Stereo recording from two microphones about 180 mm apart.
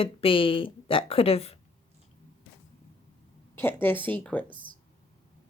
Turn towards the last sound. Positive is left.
turn(degrees=10)  # may be behind; listen again after turning